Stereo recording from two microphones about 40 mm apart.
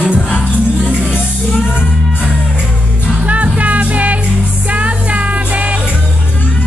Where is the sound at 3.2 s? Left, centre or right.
Right.